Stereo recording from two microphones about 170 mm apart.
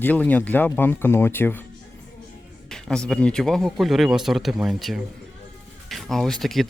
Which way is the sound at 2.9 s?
5° left (ahead or behind).